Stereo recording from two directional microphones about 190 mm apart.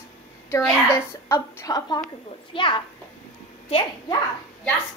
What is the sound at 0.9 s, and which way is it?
A woman's voice, 15° left (ahead or behind).